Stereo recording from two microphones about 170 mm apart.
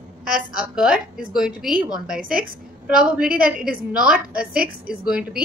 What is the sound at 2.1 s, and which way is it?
Speech, 55° right (ahead or behind).